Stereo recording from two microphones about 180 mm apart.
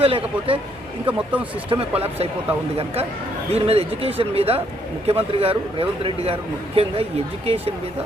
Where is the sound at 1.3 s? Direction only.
10° right (ahead or behind).